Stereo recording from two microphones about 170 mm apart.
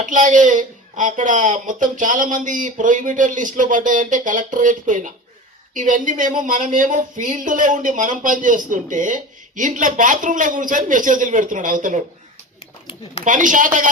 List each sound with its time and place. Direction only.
0.0 s a woman's voice: 50° right (ahead or behind)
13.2 s a woman's voice: 50° right (ahead or behind)